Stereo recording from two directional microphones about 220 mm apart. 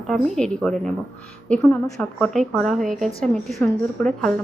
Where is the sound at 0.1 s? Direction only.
5° left (ahead or behind).